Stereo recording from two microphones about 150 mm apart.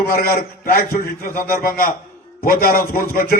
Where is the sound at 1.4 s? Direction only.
75° left (ahead or behind).